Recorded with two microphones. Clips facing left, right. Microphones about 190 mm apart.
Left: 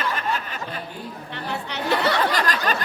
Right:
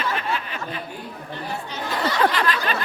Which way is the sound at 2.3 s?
40° left (ahead or behind).